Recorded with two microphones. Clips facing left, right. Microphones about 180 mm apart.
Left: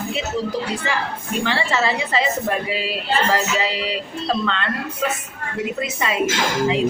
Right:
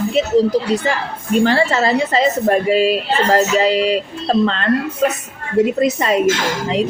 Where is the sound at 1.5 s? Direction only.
40° right (ahead or behind).